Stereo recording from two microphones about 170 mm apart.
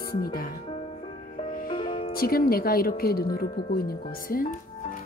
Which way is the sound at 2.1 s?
60° left (ahead or behind).